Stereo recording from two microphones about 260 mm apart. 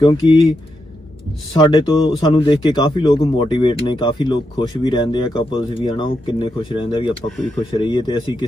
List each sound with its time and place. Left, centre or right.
0.0 s speech: centre
1.6 s speech: centre